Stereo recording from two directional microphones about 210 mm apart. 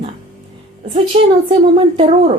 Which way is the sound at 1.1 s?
30° right (ahead or behind).